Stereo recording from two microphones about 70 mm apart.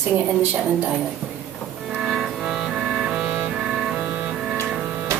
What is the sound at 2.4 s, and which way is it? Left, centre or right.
Music, centre.